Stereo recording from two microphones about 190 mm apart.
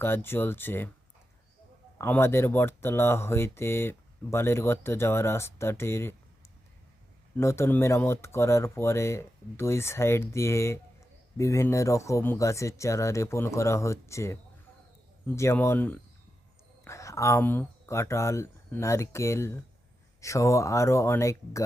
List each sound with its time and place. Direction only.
0.0 s speech: 10° left (ahead or behind)
2.0 s speech: 10° left (ahead or behind)
7.3 s speech: 15° left (ahead or behind)